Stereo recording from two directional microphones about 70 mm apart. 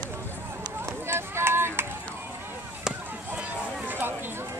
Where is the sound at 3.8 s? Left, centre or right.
Right.